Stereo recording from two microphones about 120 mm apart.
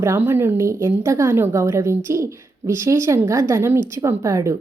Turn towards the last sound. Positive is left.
turn(degrees=-25)  # may be behind; listen again after turning